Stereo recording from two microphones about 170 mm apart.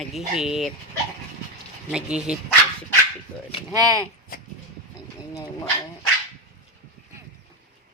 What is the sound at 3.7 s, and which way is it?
Speech, 20° right (ahead or behind).